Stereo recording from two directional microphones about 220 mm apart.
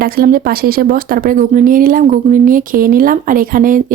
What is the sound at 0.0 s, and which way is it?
Speech, 40° right (ahead or behind).